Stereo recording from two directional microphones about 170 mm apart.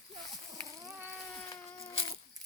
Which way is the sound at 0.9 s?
10° right (ahead or behind).